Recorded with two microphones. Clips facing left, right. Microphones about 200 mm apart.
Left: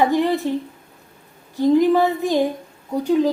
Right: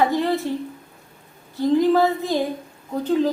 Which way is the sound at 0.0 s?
15° left (ahead or behind).